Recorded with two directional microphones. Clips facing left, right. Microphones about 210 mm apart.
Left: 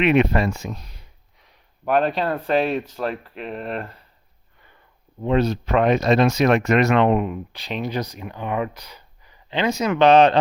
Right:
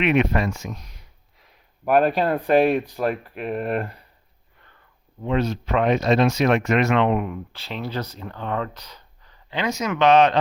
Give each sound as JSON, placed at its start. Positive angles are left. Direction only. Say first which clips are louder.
{"t": 0.0, "sound": "speech", "louder": "left 2 dB", "side_deg": 30}
{"t": 1.4, "sound": "speech", "louder": "right 1 dB", "side_deg": -10}
{"t": 5.2, "sound": "speech", "louder": "left 3 dB", "side_deg": 35}
{"t": 7.2, "sound": "speech", "louder": "left 3 dB", "side_deg": 20}
{"t": 9.5, "sound": "speech", "louder": "left 3 dB", "side_deg": 30}